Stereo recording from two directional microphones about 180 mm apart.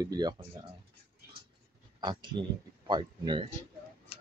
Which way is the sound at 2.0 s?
25° right (ahead or behind).